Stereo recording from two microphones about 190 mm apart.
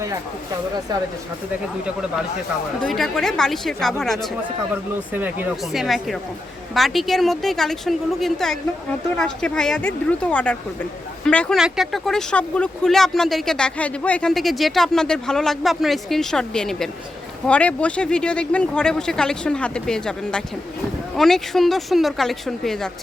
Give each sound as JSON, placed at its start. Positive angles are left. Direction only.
{"t": 2.8, "sound": "speech", "side_deg": 0}
{"t": 5.1, "sound": "speech", "side_deg": -10}